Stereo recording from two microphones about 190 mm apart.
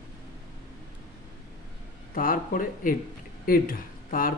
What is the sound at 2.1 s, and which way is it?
Speech, 45° left (ahead or behind).